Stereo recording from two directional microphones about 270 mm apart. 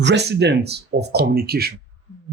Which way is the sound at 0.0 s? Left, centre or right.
Right.